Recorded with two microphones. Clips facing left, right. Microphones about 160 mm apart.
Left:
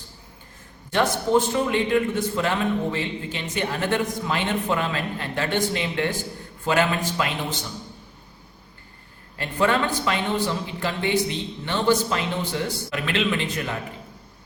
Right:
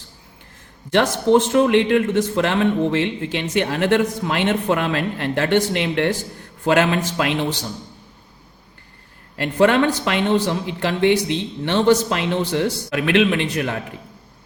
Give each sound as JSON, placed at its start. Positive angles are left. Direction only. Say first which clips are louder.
{"t": 0.9, "sound": "a man's voice", "louder": "right 5 dB", "side_deg": -80}
{"t": 9.3, "sound": "a man's voice", "louder": "right 6 dB", "side_deg": -70}